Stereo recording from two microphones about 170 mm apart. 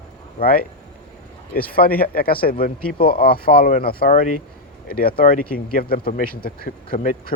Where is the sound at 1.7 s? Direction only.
60° left (ahead or behind).